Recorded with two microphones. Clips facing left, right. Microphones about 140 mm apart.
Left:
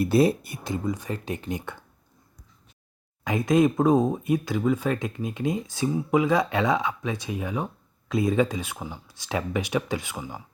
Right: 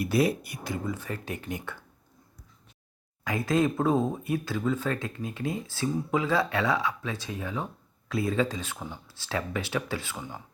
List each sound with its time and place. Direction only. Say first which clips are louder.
0.0 s speech: left 5 dB; 25° left (ahead or behind)
3.2 s speech: left 5 dB; 20° left (ahead or behind)